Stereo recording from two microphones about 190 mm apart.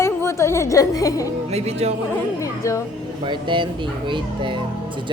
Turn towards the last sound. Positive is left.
turn(degrees=-25)  # may be behind; listen again after turning